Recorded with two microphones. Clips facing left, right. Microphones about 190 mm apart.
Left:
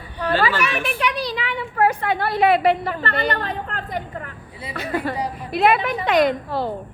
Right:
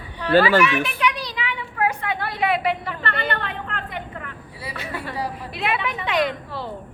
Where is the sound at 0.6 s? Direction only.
40° left (ahead or behind).